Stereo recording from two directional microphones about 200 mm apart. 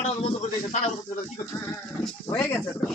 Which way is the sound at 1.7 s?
10° left (ahead or behind).